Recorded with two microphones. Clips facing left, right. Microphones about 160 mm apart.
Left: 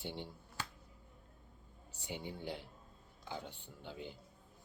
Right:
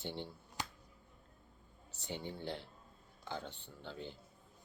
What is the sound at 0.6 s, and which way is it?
Finger snapping, 20° right (ahead or behind).